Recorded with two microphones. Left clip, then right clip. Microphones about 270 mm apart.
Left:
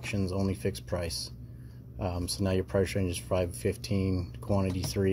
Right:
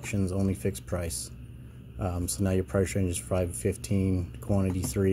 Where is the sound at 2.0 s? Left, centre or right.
Centre.